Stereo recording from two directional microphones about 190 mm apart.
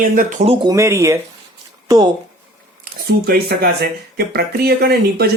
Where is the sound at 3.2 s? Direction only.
55° right (ahead or behind).